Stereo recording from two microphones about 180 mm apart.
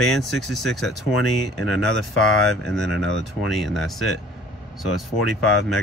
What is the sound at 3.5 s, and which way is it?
Speech, centre (ahead or behind).